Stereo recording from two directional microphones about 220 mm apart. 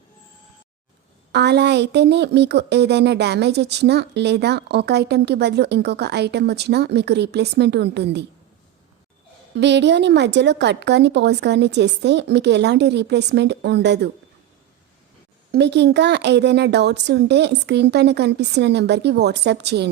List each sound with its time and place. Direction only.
1.3 s speech: 50° right (ahead or behind)
9.6 s speech: 50° right (ahead or behind)
15.5 s speech: 50° right (ahead or behind)